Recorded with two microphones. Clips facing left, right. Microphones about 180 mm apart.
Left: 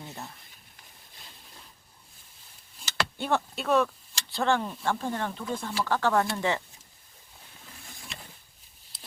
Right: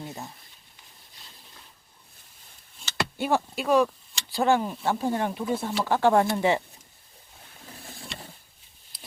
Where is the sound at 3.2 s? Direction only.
5° right (ahead or behind).